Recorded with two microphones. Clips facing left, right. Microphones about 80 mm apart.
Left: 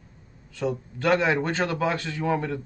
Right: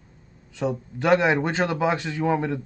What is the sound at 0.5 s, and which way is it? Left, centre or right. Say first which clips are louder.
Speech: right 1 dB; centre.